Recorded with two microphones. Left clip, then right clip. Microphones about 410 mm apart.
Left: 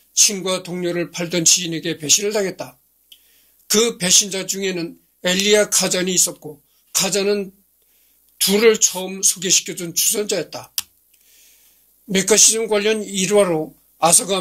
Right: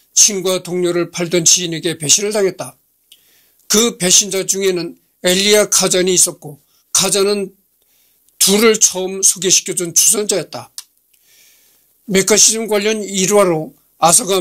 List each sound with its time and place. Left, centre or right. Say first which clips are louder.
0.1 s speech: right 4 dB; right
11.2 s a sound: right 3 dB; right
12.1 s speech: right 3 dB; right